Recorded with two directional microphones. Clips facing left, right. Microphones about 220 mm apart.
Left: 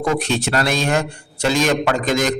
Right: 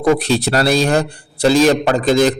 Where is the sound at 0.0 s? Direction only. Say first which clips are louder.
Right 5 dB; 35° right (ahead or behind).